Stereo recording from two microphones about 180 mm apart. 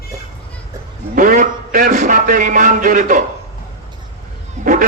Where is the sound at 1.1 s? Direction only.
45° right (ahead or behind).